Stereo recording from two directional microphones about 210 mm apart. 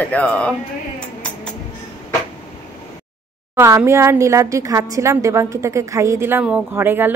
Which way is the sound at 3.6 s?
15° right (ahead or behind).